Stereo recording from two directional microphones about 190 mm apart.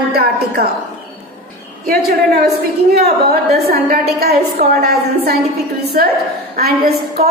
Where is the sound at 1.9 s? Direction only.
55° right (ahead or behind).